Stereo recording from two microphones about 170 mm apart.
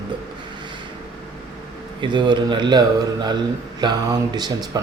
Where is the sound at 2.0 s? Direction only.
25° right (ahead or behind).